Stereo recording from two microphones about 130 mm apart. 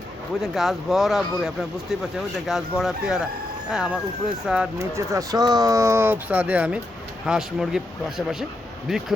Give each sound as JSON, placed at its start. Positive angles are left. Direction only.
{"t": 0.4, "sound": "a man's voice", "side_deg": 0}
{"t": 4.8, "sound": "a man's voice", "side_deg": -25}
{"t": 8.9, "sound": "a man's voice", "side_deg": 0}